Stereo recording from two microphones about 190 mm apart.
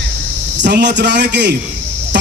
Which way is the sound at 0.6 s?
65° right (ahead or behind).